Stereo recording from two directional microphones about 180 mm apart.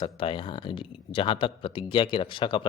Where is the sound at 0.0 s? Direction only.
30° left (ahead or behind).